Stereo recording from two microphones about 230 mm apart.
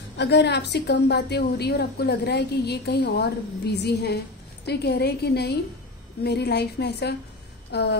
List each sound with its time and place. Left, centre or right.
0.2 s a woman's voice: left